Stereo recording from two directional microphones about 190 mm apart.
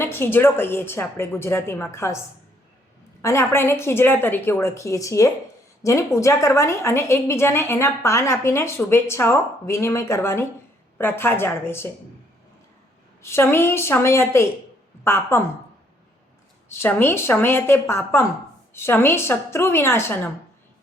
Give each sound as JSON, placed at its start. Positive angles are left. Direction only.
{"t": 0.0, "sound": "a woman's voice", "side_deg": 10}
{"t": 3.2, "sound": "a woman's voice", "side_deg": 15}
{"t": 13.2, "sound": "a woman's voice", "side_deg": 15}
{"t": 16.6, "sound": "a woman's voice", "side_deg": 10}